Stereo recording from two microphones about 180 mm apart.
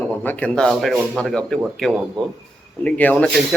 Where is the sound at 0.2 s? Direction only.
10° left (ahead or behind).